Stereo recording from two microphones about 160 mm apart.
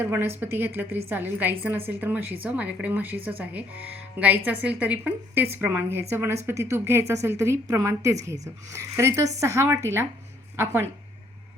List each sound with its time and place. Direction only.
0.0 s speech: 15° right (ahead or behind)